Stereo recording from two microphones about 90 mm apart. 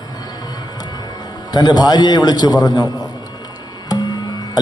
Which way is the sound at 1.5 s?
50° left (ahead or behind).